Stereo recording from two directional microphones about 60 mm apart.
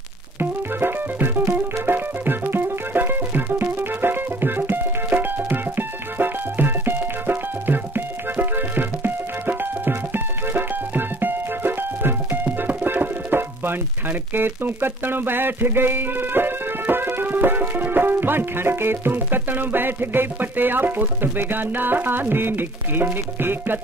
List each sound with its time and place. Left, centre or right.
0.4 s music: right